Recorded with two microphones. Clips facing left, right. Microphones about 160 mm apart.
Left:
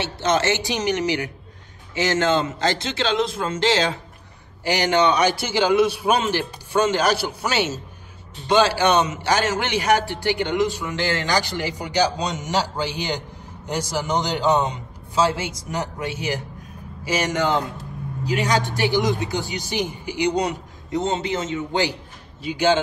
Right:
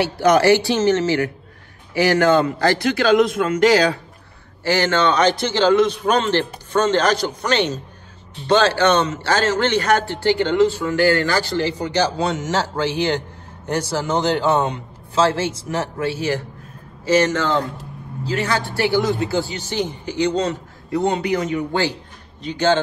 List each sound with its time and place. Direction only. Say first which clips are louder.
0.0 s a man's voice: right 6 dB; 25° left (ahead or behind)
22.4 s a man's voice: right 1 dB; 10° left (ahead or behind)